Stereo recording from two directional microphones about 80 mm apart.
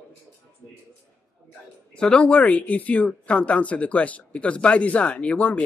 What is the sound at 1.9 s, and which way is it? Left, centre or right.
Speech, centre.